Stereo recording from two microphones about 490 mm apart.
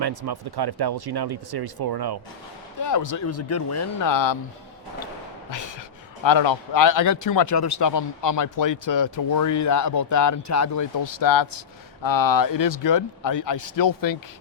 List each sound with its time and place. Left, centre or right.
0.0 s speech: right
2.7 s speech: left
5.5 s speech: left